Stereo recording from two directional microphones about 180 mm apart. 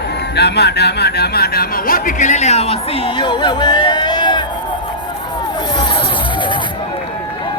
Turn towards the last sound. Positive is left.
turn(degrees=25)  # may be behind; listen again after turning